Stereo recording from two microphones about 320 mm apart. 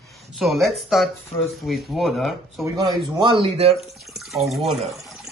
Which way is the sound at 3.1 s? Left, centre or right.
Centre.